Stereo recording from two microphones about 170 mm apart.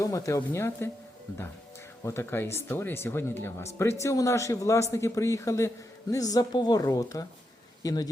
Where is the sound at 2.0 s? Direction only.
15° left (ahead or behind).